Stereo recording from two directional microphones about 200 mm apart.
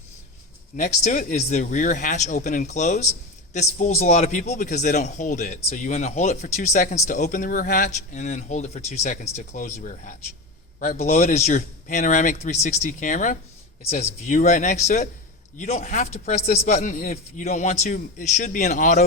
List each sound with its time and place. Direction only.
1.0 s speech: 40° left (ahead or behind)